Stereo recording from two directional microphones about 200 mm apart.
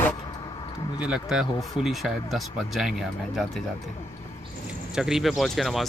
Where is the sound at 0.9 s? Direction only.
5° right (ahead or behind).